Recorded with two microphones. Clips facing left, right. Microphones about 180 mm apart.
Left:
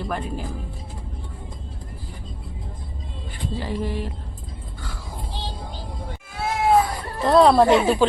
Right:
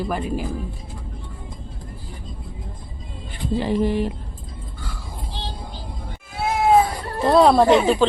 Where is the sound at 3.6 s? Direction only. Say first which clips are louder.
Right 7 dB; 20° right (ahead or behind).